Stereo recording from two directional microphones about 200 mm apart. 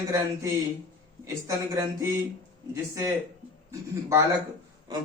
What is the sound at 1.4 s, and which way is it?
Speech, 15° right (ahead or behind).